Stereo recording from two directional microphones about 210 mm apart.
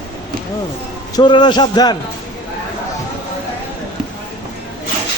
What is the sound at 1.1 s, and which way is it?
Speech, 20° left (ahead or behind).